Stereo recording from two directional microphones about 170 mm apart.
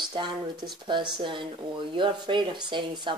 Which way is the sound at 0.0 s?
25° right (ahead or behind).